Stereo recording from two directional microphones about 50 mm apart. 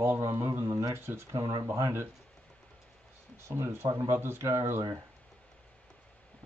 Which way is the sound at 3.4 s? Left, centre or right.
Right.